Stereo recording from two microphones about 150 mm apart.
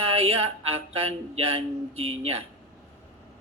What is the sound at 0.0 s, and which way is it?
Music, 40° right (ahead or behind).